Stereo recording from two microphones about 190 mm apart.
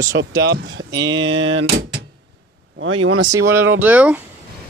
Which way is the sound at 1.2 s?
90° right.